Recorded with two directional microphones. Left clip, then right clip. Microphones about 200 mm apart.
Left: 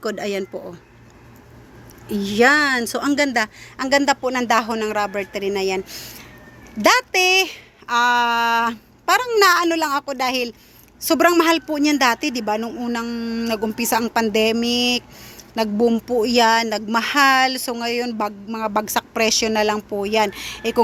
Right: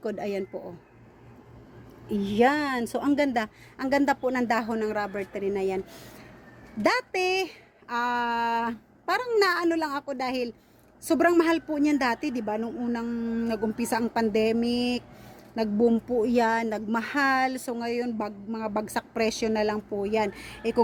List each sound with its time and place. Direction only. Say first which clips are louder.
0.0 s a woman's voice: left 6 dB; 5° left (ahead or behind)
2.0 s a woman's voice: left 7 dB; 5° left (ahead or behind)
12.2 s speech: left 7 dB; 60° left (ahead or behind)
12.5 s a woman's voice: left 7 dB; 5° left (ahead or behind)